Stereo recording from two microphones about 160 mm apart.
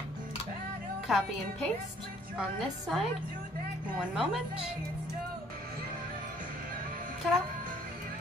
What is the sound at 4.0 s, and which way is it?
Speech, 5° right (ahead or behind).